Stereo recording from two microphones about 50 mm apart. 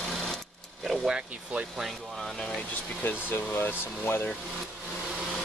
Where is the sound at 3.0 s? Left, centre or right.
Left.